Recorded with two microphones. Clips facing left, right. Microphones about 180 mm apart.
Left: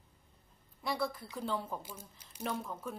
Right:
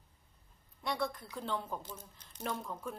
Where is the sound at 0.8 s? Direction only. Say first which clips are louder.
Left 1 dB; 5° left (ahead or behind).